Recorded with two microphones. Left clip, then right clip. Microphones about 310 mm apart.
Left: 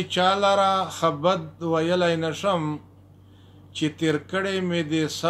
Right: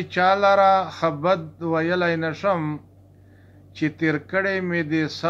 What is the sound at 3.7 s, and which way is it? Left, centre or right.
Speech, left.